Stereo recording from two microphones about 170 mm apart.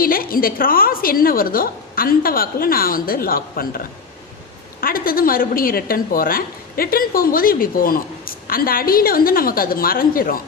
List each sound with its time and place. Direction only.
0.0 s a woman's voice: 60° left (ahead or behind)